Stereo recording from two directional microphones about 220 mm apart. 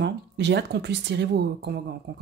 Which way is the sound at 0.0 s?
50° right (ahead or behind).